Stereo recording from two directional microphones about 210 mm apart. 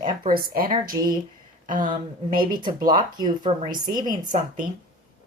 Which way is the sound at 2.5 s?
20° right (ahead or behind).